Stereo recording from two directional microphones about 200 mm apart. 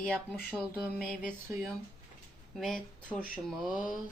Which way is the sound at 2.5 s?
Centre (ahead or behind).